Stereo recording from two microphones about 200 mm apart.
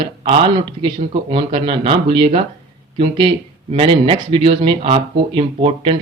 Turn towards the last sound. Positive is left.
turn(degrees=-25)  # may be behind; listen again after turning